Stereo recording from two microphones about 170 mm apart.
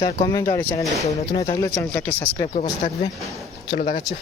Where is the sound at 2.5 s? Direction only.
35° left (ahead or behind).